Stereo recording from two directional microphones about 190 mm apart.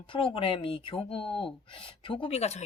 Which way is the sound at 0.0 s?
25° left (ahead or behind).